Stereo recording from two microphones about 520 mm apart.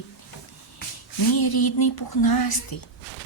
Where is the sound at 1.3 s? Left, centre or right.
Left.